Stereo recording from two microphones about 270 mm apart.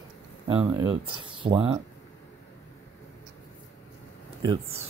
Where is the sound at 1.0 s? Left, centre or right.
Centre.